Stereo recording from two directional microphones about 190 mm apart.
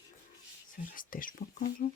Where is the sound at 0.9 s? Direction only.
45° left (ahead or behind).